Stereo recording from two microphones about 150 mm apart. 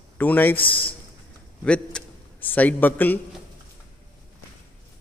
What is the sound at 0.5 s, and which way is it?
Speech, 35° left (ahead or behind).